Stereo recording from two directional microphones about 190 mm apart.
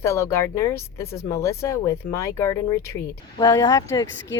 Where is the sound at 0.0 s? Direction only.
15° left (ahead or behind).